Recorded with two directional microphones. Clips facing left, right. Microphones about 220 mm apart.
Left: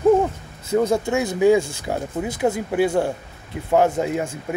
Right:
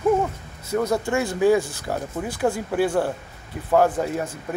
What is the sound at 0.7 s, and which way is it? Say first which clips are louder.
Speech: left 3 dB; 25° left (ahead or behind).